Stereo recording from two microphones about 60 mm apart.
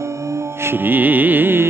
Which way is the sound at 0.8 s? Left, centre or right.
Right.